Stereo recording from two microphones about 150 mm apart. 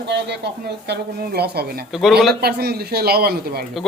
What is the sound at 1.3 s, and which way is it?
A man's voice, 90° right.